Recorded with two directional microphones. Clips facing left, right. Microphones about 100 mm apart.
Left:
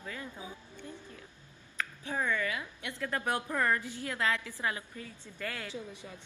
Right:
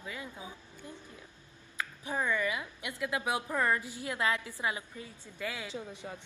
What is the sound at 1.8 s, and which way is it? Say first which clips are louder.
A woman's voice: even; 15° right (ahead or behind).